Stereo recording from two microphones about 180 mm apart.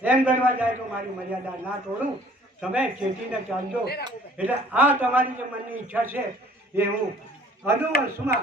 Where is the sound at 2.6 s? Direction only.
5° right (ahead or behind).